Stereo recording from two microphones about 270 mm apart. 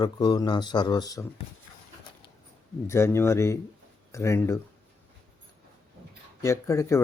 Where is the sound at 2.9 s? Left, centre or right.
Centre.